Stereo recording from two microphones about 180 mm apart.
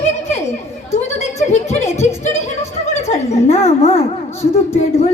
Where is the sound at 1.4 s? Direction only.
40° left (ahead or behind).